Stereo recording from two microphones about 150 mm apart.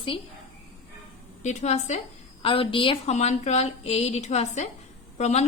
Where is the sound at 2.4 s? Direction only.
35° left (ahead or behind).